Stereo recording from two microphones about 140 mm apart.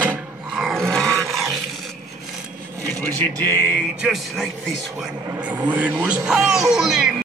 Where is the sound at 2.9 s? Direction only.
15° left (ahead or behind).